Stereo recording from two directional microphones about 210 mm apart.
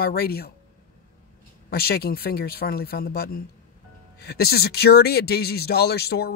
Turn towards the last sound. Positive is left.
turn(degrees=50)  # may be behind; listen again after turning